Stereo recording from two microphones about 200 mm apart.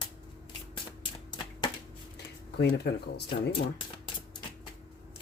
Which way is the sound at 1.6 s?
25° left (ahead or behind).